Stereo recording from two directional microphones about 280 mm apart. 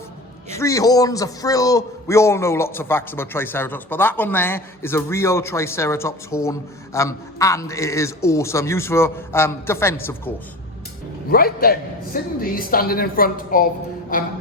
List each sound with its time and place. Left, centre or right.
0.5 s a man's voice: centre
11.3 s a man's voice: left
14.1 s music: left